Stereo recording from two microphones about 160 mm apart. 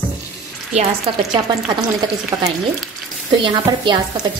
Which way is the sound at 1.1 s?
30° right (ahead or behind).